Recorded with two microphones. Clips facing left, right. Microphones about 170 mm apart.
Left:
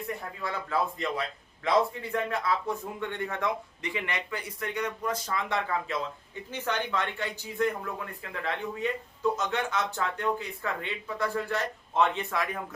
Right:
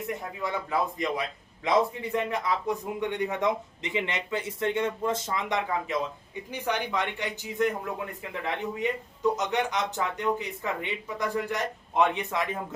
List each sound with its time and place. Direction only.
0.1 s a man's voice: 20° right (ahead or behind)